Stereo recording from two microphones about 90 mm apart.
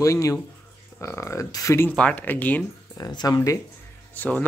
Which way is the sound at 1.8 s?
15° left (ahead or behind).